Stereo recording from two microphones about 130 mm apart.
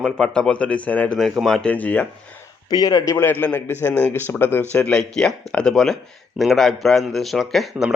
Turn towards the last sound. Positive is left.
turn(degrees=0)  # may be behind; listen again after turning